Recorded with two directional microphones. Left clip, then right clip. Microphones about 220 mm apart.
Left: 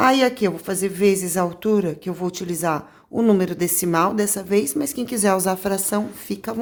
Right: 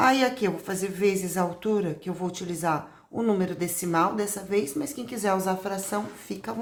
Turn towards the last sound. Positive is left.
turn(degrees=50)  # may be behind; listen again after turning